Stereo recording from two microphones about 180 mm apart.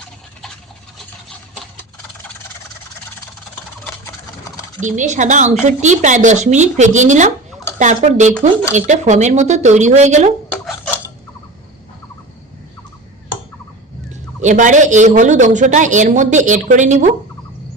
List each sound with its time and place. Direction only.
4.8 s speech: 45° right (ahead or behind)
14.4 s speech: 45° right (ahead or behind)